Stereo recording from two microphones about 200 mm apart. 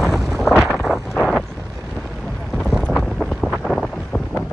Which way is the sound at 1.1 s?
5° left (ahead or behind).